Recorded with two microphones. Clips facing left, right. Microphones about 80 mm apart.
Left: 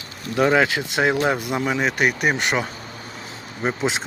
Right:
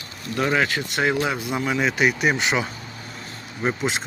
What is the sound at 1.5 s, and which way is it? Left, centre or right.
Speech, centre.